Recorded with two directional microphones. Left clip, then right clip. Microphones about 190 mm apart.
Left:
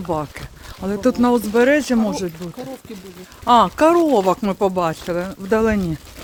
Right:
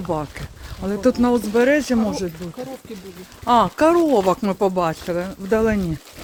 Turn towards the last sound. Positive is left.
turn(degrees=15)  # may be behind; listen again after turning